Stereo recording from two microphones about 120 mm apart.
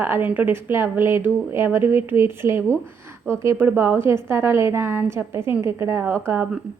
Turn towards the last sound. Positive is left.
turn(degrees=-20)  # may be behind; listen again after turning